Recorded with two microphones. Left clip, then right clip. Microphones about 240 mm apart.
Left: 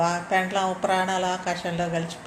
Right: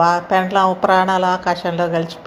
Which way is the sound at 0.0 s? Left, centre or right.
Right.